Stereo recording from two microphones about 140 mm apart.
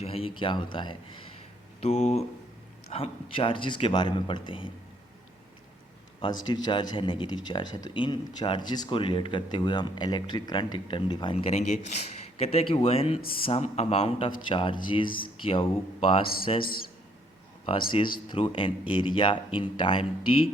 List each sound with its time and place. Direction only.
0.0 s speech: 45° left (ahead or behind)
1.8 s a man's voice: 50° left (ahead or behind)
2.9 s speech: 40° left (ahead or behind)
6.2 s speech: 35° left (ahead or behind)
11.5 s a man's voice: 55° left (ahead or behind)
17.7 s speech: 40° left (ahead or behind)